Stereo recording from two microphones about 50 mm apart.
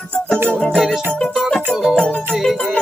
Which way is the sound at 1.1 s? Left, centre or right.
Left.